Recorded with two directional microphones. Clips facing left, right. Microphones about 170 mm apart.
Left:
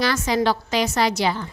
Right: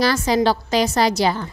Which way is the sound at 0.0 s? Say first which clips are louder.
Right 3 dB; 35° right (ahead or behind).